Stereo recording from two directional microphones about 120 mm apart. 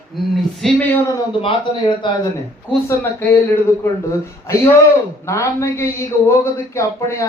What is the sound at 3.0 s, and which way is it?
Speech, 15° left (ahead or behind).